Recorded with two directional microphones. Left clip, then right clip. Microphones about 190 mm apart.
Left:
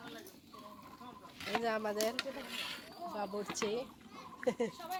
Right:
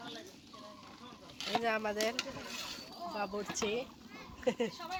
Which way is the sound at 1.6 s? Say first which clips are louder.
Right 1 dB; 20° left (ahead or behind).